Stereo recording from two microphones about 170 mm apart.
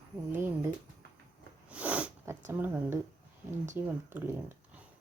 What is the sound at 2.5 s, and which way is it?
Speech, 10° right (ahead or behind).